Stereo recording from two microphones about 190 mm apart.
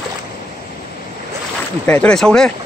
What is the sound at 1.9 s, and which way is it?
Speech, 5° left (ahead or behind).